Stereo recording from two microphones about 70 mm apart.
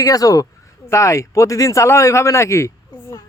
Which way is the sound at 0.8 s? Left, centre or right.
Left.